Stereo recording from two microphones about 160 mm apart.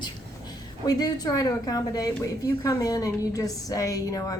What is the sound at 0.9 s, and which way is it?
Speech, 25° left (ahead or behind).